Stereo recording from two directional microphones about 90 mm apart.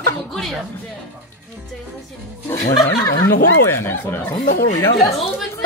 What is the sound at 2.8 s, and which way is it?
Speech, 40° left (ahead or behind).